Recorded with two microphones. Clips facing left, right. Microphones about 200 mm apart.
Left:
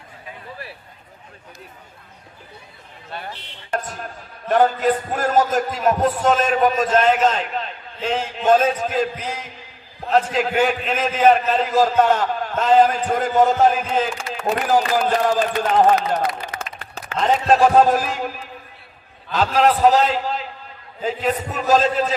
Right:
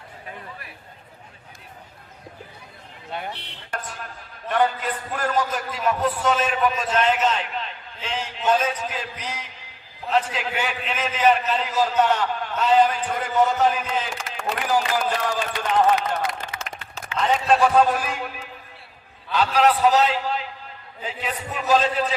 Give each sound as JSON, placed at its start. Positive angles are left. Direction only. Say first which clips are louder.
{"t": 4.4, "sound": "a man's voice", "louder": "left 6 dB", "side_deg": 45}
{"t": 16.5, "sound": "a sound", "louder": "left 3 dB", "side_deg": 50}
{"t": 17.1, "sound": "a man's voice", "louder": "left 3 dB", "side_deg": 45}
{"t": 19.3, "sound": "a man's voice", "louder": "left 2 dB", "side_deg": 45}